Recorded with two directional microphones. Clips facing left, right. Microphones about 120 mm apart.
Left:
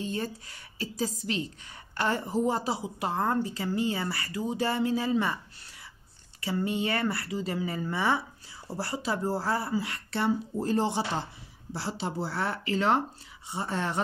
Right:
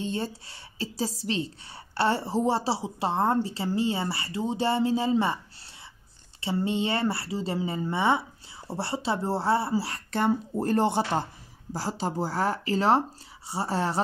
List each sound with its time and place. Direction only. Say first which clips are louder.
0.0 s a woman's voice: right 2 dB; 30° right (ahead or behind)
6.4 s a woman's voice: right 2 dB; 25° right (ahead or behind); by 11.2 s 55° right (ahead or behind)
11.7 s speech: right 3 dB; 40° right (ahead or behind)